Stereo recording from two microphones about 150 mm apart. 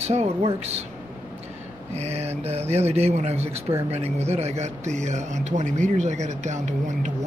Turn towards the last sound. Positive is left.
turn(degrees=-50)  # may be behind; listen again after turning